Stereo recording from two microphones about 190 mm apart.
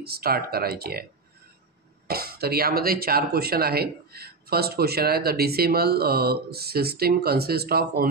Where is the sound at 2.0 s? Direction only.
55° right (ahead or behind).